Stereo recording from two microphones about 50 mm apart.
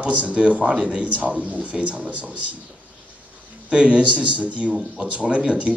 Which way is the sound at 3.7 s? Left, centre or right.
Right.